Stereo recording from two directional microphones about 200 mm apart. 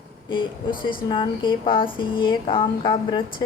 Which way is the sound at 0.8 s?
25° left (ahead or behind).